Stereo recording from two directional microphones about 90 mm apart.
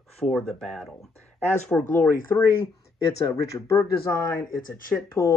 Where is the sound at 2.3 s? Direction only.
30° left (ahead or behind).